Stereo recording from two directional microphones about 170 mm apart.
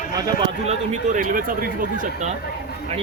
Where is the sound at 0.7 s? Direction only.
50° right (ahead or behind).